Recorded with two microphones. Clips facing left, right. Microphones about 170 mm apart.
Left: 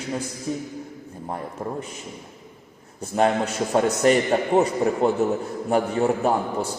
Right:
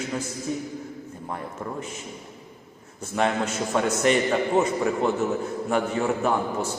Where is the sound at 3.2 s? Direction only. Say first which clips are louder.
Left 3 dB; 35° left (ahead or behind).